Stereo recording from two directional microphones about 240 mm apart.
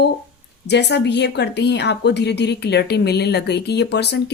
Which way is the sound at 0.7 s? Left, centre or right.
Left.